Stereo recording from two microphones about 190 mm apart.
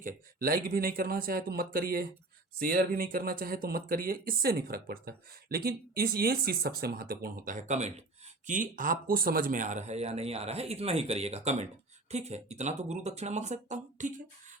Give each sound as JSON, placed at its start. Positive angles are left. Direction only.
{"t": 0.0, "sound": "speech", "side_deg": -50}